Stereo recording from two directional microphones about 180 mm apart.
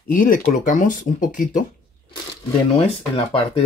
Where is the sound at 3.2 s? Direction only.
30° left (ahead or behind).